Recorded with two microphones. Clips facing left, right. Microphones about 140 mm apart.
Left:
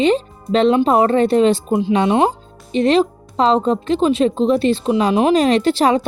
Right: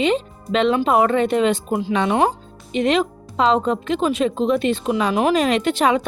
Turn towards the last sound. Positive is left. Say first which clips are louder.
# left 3 dB
turn(degrees=35)  # may be behind; listen again after turning